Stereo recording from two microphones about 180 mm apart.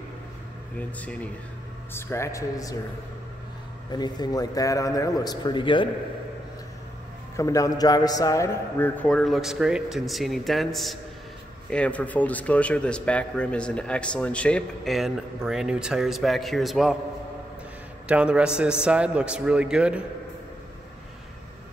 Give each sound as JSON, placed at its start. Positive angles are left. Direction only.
{"t": 0.7, "sound": "speech", "side_deg": 5}
{"t": 3.9, "sound": "a man's voice", "side_deg": 25}
{"t": 7.3, "sound": "a man's voice", "side_deg": 20}
{"t": 18.0, "sound": "a man's voice", "side_deg": -5}